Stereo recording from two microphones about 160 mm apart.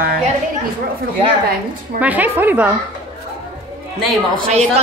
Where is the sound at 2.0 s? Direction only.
10° right (ahead or behind).